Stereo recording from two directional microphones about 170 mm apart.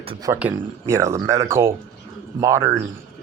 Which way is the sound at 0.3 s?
10° right (ahead or behind).